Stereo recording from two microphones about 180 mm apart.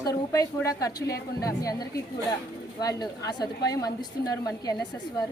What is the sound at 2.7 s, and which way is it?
A woman's voice, 20° left (ahead or behind).